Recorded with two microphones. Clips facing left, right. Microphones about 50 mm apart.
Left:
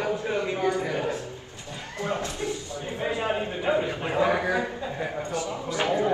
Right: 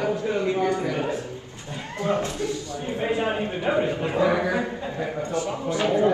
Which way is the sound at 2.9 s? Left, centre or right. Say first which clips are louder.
Right 3 dB; right.